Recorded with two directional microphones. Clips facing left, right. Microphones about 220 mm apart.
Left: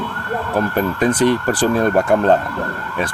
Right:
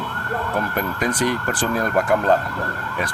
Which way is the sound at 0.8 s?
30° left (ahead or behind).